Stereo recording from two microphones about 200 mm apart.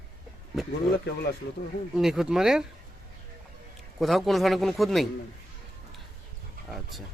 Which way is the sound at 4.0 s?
Centre (ahead or behind).